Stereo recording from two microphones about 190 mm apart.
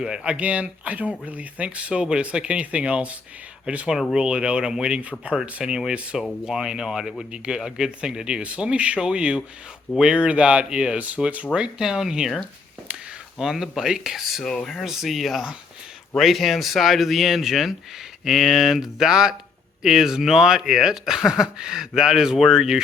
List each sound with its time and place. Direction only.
0.0 s speech: 5° right (ahead or behind)
12.9 s a sound: 5° right (ahead or behind)
13.4 s speech: 5° right (ahead or behind)